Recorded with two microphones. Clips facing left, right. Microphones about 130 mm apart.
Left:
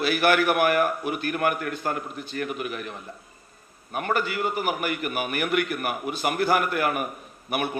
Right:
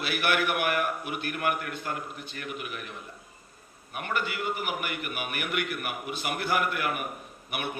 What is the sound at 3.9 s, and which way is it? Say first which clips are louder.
A man's voice: left 6 dB; 40° left (ahead or behind).